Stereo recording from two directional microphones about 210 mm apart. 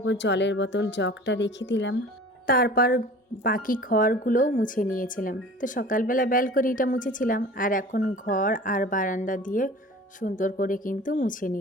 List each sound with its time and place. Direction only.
0.0 s speech: 60° left (ahead or behind)
2.5 s a woman's voice: 45° left (ahead or behind)